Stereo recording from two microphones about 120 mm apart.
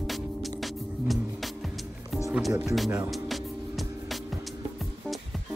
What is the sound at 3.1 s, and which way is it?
Music, centre (ahead or behind).